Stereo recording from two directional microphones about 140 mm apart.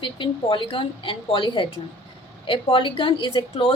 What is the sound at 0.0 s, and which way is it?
A woman's voice, 35° left (ahead or behind).